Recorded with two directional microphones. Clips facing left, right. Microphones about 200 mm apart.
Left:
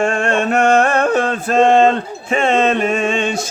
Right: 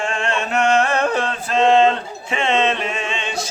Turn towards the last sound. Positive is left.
turn(degrees=50)  # may be behind; listen again after turning